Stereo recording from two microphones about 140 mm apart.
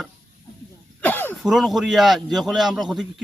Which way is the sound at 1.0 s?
15° left (ahead or behind).